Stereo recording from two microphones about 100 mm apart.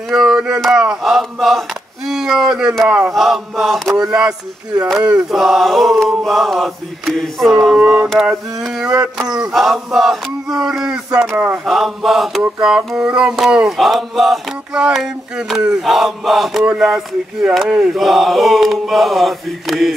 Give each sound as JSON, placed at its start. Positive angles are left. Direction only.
{"t": 0.1, "sound": "mantra", "side_deg": -5}
{"t": 2.0, "sound": "speech", "side_deg": -5}
{"t": 3.1, "sound": "mantra", "side_deg": 0}
{"t": 3.9, "sound": "a sound", "side_deg": -5}
{"t": 5.3, "sound": "mantra", "side_deg": 0}
{"t": 9.2, "sound": "mantra", "side_deg": -5}
{"t": 10.7, "sound": "a sound", "side_deg": -5}
{"t": 11.5, "sound": "mantra", "side_deg": 0}